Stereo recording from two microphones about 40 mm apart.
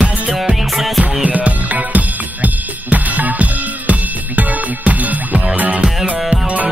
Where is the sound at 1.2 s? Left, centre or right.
Right.